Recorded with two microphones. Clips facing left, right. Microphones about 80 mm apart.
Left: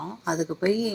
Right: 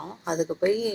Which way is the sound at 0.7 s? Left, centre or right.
Right.